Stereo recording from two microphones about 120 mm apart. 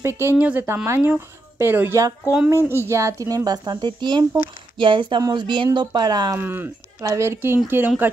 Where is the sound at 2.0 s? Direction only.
30° right (ahead or behind).